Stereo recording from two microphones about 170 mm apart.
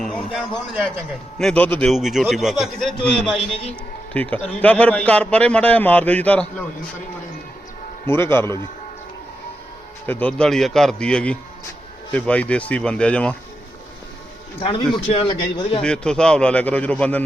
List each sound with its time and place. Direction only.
0.0 s a man's voice: centre (ahead or behind)
3.3 s a man's voice: 35° left (ahead or behind)
4.1 s a man's voice: 10° left (ahead or behind)
8.0 s a man's voice: 15° left (ahead or behind)
10.1 s a man's voice: 10° left (ahead or behind)
15.0 s a man's voice: 35° left (ahead or behind)
15.8 s a man's voice: 5° left (ahead or behind)